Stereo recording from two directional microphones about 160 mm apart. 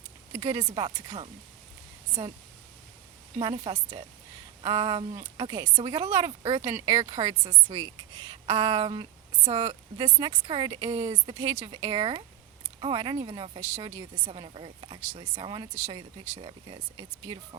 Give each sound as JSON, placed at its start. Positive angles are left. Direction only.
{"t": 0.3, "sound": "a woman's voice", "side_deg": -35}
{"t": 3.5, "sound": "a woman's voice", "side_deg": -45}
{"t": 4.6, "sound": "a woman's voice", "side_deg": -30}
{"t": 6.4, "sound": "a woman's voice", "side_deg": -40}
{"t": 6.7, "sound": "speech", "side_deg": -20}
{"t": 6.9, "sound": "a woman's voice", "side_deg": -35}